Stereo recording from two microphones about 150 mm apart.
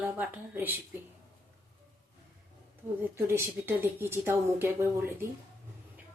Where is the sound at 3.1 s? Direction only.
15° right (ahead or behind).